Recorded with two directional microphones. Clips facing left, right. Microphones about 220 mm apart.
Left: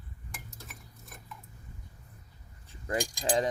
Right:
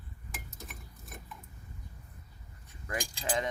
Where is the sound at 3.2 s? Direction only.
30° left (ahead or behind).